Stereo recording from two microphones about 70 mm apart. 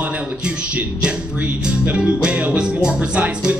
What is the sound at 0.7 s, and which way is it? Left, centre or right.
Speech, centre.